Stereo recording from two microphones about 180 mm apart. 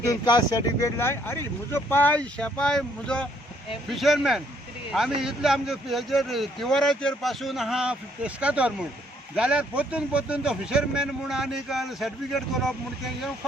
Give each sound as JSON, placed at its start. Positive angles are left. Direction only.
{"t": 0.0, "sound": "speech", "side_deg": 20}